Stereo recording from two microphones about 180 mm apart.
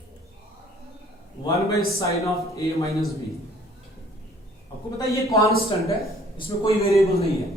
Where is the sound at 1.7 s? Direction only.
15° left (ahead or behind).